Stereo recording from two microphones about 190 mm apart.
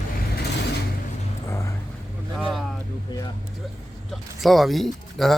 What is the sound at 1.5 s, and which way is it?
Vehicle, 15° left (ahead or behind).